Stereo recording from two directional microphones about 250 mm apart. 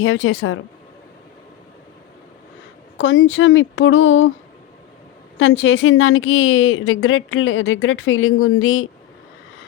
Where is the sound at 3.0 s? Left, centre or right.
Left.